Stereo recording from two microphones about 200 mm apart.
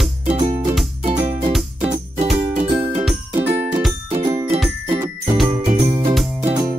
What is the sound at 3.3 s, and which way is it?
Music, 30° right (ahead or behind).